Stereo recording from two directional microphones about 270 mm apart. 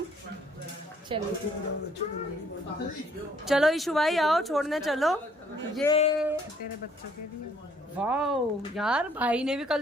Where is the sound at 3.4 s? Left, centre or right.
Centre.